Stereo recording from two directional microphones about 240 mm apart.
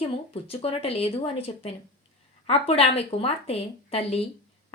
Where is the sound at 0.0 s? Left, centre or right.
Left.